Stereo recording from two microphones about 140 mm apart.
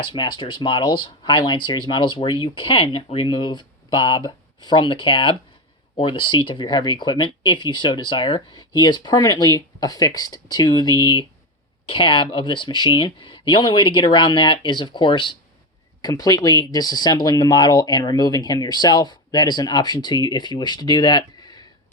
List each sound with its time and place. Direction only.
0.1 s speech: 35° left (ahead or behind)